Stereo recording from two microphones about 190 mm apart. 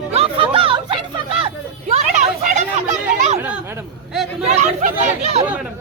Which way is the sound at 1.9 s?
40° right (ahead or behind).